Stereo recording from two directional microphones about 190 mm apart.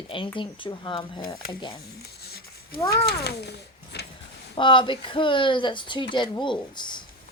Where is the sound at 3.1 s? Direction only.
60° left (ahead or behind).